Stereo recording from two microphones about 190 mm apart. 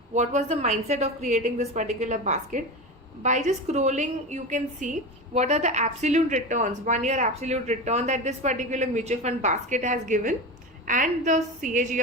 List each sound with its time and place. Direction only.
0.1 s a woman's voice: 35° right (ahead or behind)